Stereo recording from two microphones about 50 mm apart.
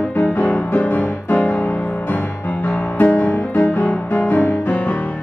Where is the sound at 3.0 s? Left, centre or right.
Left.